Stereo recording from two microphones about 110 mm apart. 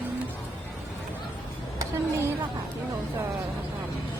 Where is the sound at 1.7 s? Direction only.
25° right (ahead or behind).